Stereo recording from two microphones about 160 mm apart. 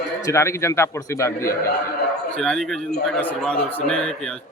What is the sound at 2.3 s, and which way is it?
A man's voice, 5° left (ahead or behind).